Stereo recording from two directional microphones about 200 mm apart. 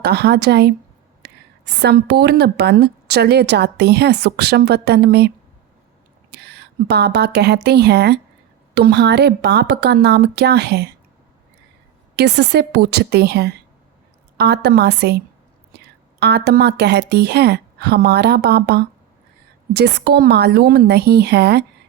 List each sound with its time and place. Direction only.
0.0 s speech: 55° right (ahead or behind)
1.2 s a sound: 55° right (ahead or behind)
1.8 s a woman's voice: 55° right (ahead or behind)
6.3 s a woman's voice: 55° right (ahead or behind)
12.1 s a woman's voice: 55° right (ahead or behind)